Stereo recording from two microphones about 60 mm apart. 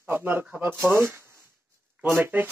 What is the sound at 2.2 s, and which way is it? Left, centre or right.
Speech, right.